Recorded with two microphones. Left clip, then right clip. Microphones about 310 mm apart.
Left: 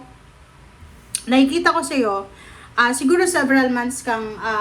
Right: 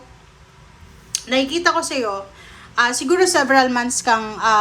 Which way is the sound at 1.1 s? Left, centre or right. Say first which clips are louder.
Left 2 dB; centre.